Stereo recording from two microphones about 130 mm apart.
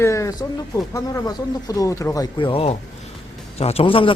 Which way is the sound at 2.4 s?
45° left (ahead or behind).